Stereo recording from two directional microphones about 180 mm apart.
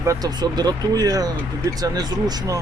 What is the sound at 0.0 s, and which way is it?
Speech, 20° right (ahead or behind).